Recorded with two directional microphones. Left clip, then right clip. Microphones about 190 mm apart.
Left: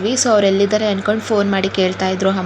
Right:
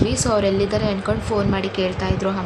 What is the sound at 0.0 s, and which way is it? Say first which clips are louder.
A woman's voice: left 5 dB; 15° left (ahead or behind).